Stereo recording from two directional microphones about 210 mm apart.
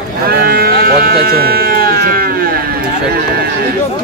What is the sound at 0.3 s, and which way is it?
Sheep, 45° right (ahead or behind).